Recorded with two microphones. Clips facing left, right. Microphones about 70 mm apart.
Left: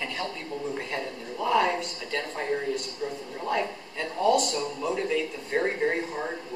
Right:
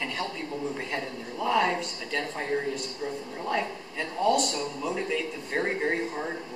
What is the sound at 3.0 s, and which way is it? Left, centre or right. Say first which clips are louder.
Speech: right 1 dB; centre.